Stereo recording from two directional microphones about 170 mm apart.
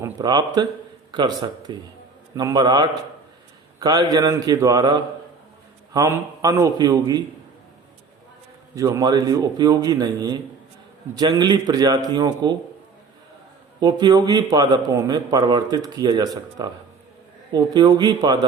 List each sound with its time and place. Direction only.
0.0 s a man's voice: 25° right (ahead or behind)
8.7 s a man's voice: 20° right (ahead or behind)
13.7 s a man's voice: 25° right (ahead or behind)
17.5 s a man's voice: 25° right (ahead or behind)